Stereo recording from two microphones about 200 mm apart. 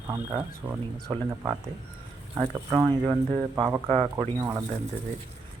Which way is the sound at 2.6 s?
20° right (ahead or behind).